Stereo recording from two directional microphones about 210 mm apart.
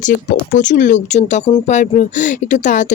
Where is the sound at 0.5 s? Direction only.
35° left (ahead or behind).